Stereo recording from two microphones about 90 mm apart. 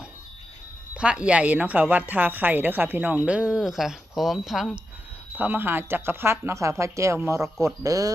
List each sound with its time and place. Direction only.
0.9 s a woman's voice: 10° right (ahead or behind)
5.4 s speech: 20° right (ahead or behind); by 8.1 s 40° right (ahead or behind)